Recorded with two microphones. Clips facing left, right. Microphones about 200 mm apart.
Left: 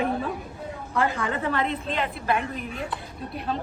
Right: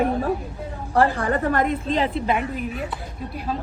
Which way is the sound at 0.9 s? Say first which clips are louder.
Right 6 dB; 60° right (ahead or behind).